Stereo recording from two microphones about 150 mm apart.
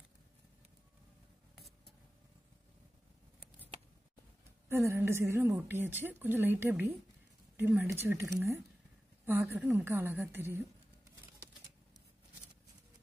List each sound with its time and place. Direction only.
4.6 s a woman's voice: 15° right (ahead or behind)